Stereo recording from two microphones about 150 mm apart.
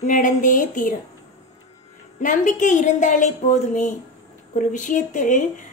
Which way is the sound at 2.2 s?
60° left (ahead or behind).